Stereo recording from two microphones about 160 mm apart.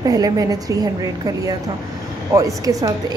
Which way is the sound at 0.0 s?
25° right (ahead or behind).